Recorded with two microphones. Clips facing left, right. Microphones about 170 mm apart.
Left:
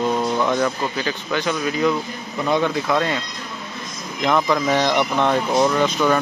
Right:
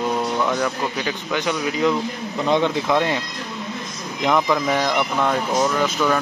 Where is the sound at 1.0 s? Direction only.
15° right (ahead or behind).